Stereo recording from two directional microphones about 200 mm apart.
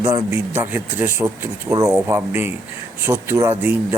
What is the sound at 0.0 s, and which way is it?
Speech, 15° right (ahead or behind).